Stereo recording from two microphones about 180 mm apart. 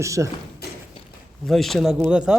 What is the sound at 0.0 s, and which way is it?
Speech, 15° right (ahead or behind).